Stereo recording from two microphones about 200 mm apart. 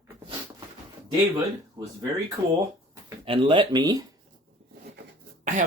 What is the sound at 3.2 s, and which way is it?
Speech, 25° right (ahead or behind).